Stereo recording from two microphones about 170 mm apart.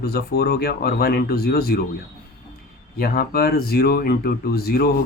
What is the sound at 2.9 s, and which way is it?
Speech, 60° left (ahead or behind).